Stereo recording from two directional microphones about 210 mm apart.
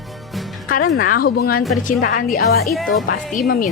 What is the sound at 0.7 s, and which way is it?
A woman's voice, 45° left (ahead or behind).